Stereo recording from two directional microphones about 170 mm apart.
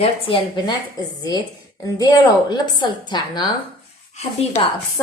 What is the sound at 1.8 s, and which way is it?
A woman's voice, 20° left (ahead or behind).